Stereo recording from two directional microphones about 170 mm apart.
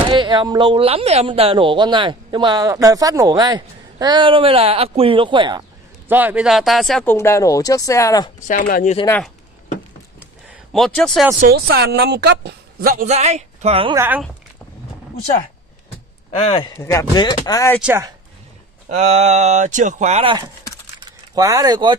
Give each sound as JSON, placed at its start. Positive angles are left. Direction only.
{"t": 0.2, "sound": "speech", "side_deg": -25}
{"t": 6.0, "sound": "speech", "side_deg": -10}
{"t": 7.2, "sound": "speech", "side_deg": 15}
{"t": 8.5, "sound": "speech", "side_deg": 55}
{"t": 10.7, "sound": "speech", "side_deg": 0}
{"t": 11.3, "sound": "speech", "side_deg": -60}
{"t": 13.1, "sound": "speech", "side_deg": -40}
{"t": 13.9, "sound": "speech", "side_deg": -10}
{"t": 16.6, "sound": "speech", "side_deg": 20}
{"t": 18.9, "sound": "speech", "side_deg": -40}
{"t": 21.0, "sound": "a sound", "side_deg": -20}